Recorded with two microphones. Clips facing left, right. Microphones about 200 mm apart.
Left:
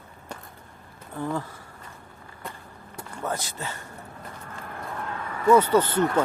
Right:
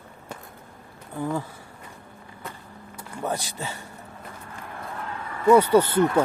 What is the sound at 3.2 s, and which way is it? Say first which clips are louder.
Speech: right 2 dB; 15° right (ahead or behind).